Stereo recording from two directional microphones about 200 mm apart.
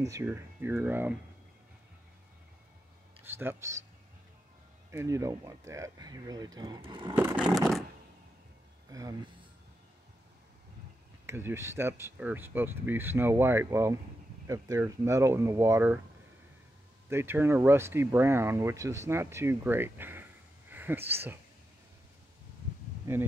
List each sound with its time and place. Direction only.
0.0 s speech: 15° right (ahead or behind)
3.3 s speech: 10° right (ahead or behind)
4.9 s speech: 15° right (ahead or behind)
7.2 s a sound: 10° right (ahead or behind)
8.9 s speech: 20° right (ahead or behind)
11.2 s speech: 10° right (ahead or behind)
17.1 s speech: 10° right (ahead or behind)
20.7 s a sound: 10° right (ahead or behind)
21.1 s speech: 10° right (ahead or behind)
23.1 s speech: 10° right (ahead or behind)